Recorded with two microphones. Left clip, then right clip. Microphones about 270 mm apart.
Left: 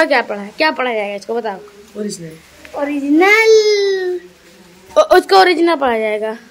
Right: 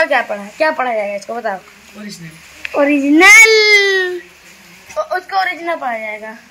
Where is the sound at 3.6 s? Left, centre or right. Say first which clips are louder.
Right 3 dB; right.